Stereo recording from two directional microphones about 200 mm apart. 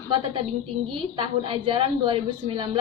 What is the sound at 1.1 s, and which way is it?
A woman's voice, 25° right (ahead or behind).